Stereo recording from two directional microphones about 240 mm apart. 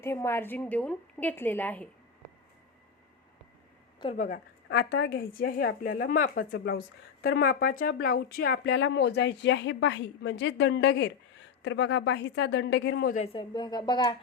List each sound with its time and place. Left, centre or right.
0.0 s a woman's voice: centre
4.0 s speech: left
13.2 s a woman's voice: left